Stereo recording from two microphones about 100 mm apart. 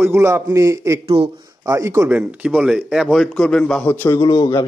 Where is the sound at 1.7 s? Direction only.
30° right (ahead or behind).